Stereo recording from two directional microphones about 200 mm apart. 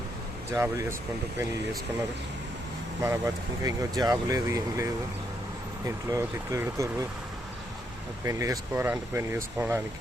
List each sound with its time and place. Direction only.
0.5 s speech: 15° right (ahead or behind)
3.0 s speech: 15° right (ahead or behind)
8.2 s speech: 15° right (ahead or behind)